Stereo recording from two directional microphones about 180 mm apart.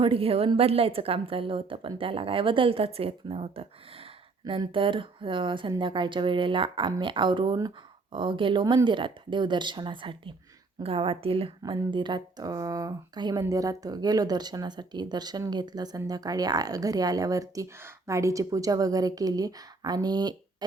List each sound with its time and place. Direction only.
0.0 s a woman's voice: 30° right (ahead or behind)